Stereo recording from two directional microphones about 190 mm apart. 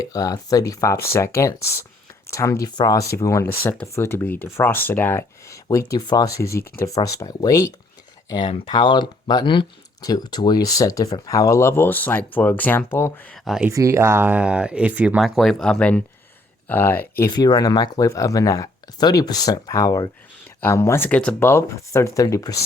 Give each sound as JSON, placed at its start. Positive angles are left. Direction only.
{"t": 0.0, "sound": "speech", "side_deg": 20}
{"t": 13.3, "sound": "speech", "side_deg": 0}
{"t": 13.7, "sound": "speech", "side_deg": -15}